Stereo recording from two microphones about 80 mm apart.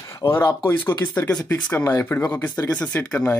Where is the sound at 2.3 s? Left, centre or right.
Left.